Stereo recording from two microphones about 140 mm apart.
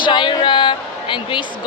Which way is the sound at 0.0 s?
35° left (ahead or behind).